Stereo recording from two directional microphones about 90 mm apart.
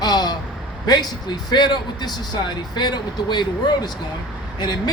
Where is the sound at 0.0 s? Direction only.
50° left (ahead or behind).